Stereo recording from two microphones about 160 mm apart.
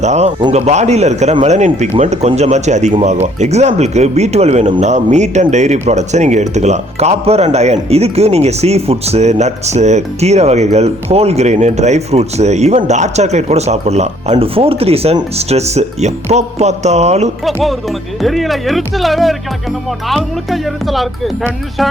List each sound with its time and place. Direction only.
0.0 s speech: 45° right (ahead or behind)
17.4 s speech: centre (ahead or behind)